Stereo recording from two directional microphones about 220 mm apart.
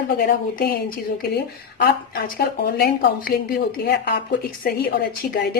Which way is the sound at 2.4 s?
45° left (ahead or behind).